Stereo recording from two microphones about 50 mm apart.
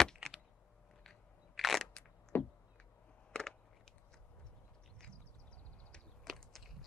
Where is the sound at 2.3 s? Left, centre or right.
Left.